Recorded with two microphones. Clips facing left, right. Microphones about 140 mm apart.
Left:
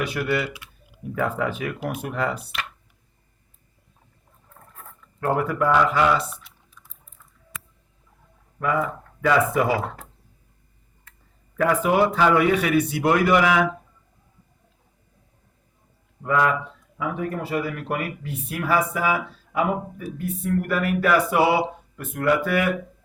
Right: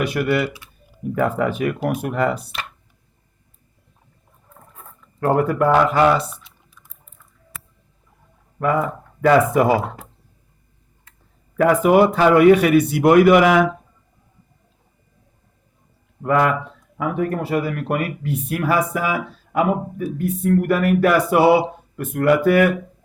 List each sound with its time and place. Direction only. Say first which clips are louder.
0.1 s speech: right 5 dB; 60° right (ahead or behind)
1.8 s speech: right 4 dB; 45° right (ahead or behind)
5.2 s speech: right 5 dB; 45° right (ahead or behind)
8.5 s speech: right 4 dB; 45° right (ahead or behind)
9.7 s speech: right 5 dB; 10° right (ahead or behind)
11.5 s speech: right 6 dB; 55° right (ahead or behind)
16.2 s speech: right 4 dB; 60° right (ahead or behind)